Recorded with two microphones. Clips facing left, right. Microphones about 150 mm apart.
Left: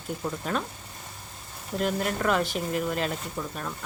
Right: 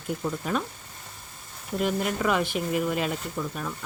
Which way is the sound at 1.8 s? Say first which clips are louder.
Right 1 dB; 5° right (ahead or behind).